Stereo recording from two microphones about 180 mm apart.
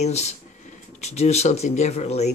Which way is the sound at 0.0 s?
40° left (ahead or behind).